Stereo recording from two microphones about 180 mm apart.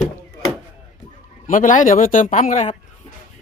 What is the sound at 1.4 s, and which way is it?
Speech, 45° left (ahead or behind).